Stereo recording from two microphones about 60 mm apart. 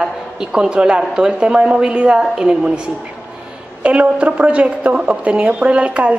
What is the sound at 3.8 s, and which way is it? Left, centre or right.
A woman's voice, right.